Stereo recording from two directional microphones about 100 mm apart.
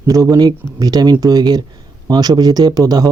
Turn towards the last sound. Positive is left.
turn(degrees=-40)  # may be behind; listen again after turning